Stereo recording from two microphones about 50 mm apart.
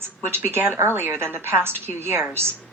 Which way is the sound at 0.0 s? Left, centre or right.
Right.